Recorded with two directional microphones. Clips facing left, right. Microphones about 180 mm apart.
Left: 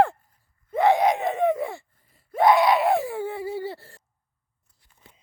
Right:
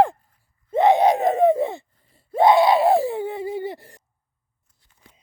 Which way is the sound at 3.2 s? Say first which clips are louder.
Right 2 dB; 20° right (ahead or behind).